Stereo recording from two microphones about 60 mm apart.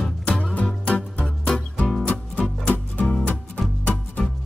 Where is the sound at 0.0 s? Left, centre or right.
Centre.